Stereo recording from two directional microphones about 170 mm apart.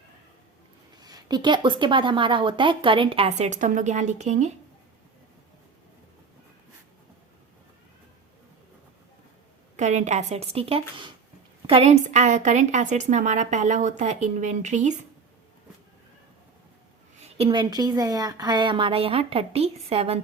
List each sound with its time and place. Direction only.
0.9 s a woman's voice: 25° right (ahead or behind); by 4.5 s 45° right (ahead or behind)
9.7 s a woman's voice: 45° right (ahead or behind)
17.2 s a woman's voice: 35° right (ahead or behind)